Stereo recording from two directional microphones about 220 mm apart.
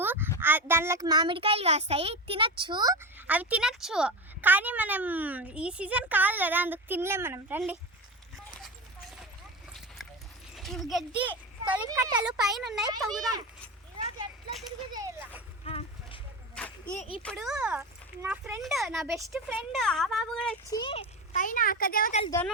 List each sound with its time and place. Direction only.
0.0 s a sound: 10° right (ahead or behind)
0.3 s a child's voice: 10° right (ahead or behind)
10.5 s speech: centre (ahead or behind)
11.9 s a child's voice: 15° right (ahead or behind)
12.2 s a child's voice: centre (ahead or behind)
13.1 s a child's voice: 15° right (ahead or behind)
14.9 s a child's voice: 10° right (ahead or behind)
15.6 s a sound: 25° left (ahead or behind)
16.8 s a child's voice: 30° left (ahead or behind)
17.2 s a child's voice: centre (ahead or behind)
20.7 s a child's voice: 20° left (ahead or behind); by 22.2 s 40° left (ahead or behind)